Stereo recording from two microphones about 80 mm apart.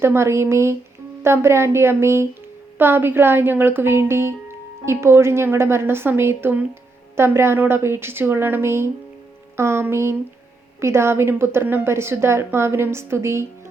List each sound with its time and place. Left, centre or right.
0.0 s a woman's voice: right